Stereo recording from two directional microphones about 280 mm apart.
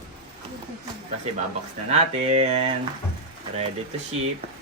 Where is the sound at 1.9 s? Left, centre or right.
Right.